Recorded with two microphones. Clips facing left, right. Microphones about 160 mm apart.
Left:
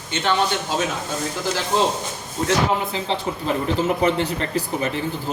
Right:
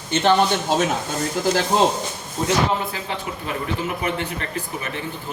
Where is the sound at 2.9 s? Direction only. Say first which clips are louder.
Left 4 dB; 20° left (ahead or behind).